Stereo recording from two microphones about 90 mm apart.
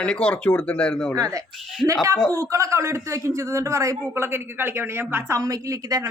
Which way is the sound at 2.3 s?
35° right (ahead or behind).